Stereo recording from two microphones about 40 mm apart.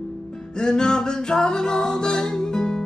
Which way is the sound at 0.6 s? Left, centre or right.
Centre.